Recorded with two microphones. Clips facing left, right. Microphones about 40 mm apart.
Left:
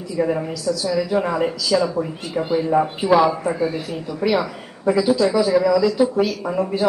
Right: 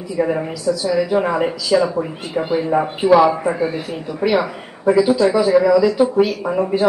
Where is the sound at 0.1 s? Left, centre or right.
Centre.